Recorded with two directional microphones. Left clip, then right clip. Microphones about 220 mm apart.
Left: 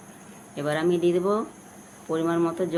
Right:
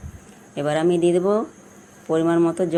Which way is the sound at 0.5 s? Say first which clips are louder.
Right 5 dB; 25° right (ahead or behind).